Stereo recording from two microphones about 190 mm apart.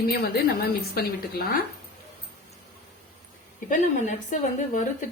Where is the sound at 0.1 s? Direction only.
55° left (ahead or behind).